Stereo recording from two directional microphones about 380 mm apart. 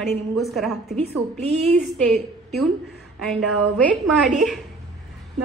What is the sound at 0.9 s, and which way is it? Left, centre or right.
Speech, centre.